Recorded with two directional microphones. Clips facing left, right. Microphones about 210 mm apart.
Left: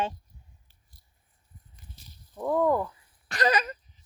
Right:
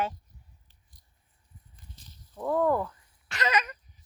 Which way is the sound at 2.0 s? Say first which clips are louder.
Left 2 dB; 10° left (ahead or behind).